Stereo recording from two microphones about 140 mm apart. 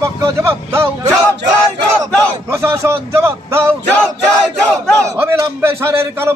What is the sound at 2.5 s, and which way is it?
A man's voice, 20° right (ahead or behind).